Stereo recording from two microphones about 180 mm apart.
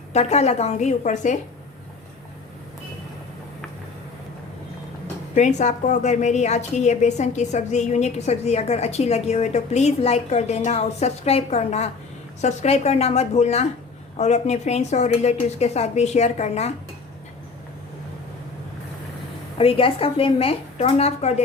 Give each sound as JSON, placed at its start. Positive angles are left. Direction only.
{"t": 0.1, "sound": "a woman's voice", "side_deg": 35}
{"t": 5.3, "sound": "a woman's voice", "side_deg": 40}
{"t": 19.5, "sound": "a woman's voice", "side_deg": 30}